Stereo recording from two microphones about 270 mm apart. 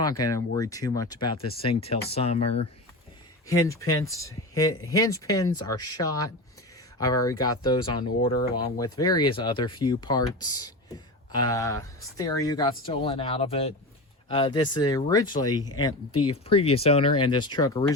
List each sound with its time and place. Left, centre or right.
0.0 s speech: centre
3.4 s speech: centre